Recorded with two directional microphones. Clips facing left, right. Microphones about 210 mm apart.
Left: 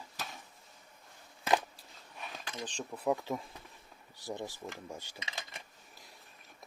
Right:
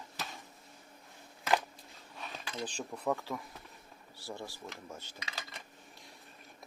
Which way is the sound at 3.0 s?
20° left (ahead or behind).